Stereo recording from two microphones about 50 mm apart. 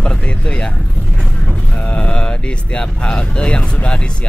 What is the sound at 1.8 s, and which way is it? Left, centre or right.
Speech, left.